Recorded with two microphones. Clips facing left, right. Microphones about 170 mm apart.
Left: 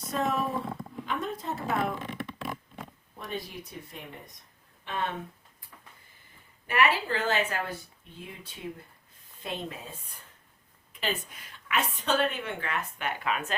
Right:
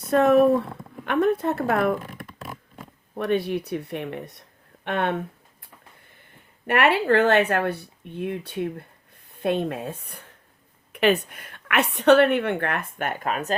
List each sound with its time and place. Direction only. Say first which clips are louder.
0.0 s a woman's voice: right 13 dB; 65° right (ahead or behind)
3.2 s a woman's voice: right 14 dB; 65° right (ahead or behind); by 13.6 s 40° right (ahead or behind)